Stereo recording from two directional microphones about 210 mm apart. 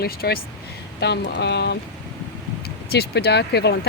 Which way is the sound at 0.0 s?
45° left (ahead or behind).